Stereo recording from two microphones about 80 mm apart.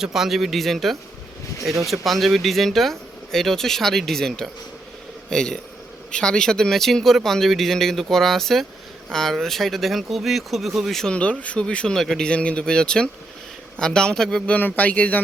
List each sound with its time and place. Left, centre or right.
0.0 s speech: centre
11.1 s speech: centre
14.5 s speech: centre